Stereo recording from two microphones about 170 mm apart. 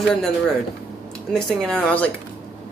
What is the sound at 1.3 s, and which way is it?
Speech, 5° left (ahead or behind).